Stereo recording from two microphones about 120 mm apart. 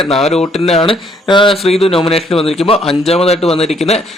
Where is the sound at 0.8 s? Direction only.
40° left (ahead or behind).